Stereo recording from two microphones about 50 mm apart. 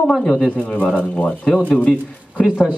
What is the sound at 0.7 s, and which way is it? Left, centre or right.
Speech, left.